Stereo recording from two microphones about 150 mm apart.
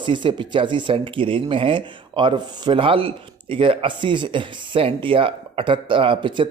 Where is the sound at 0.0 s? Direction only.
30° right (ahead or behind).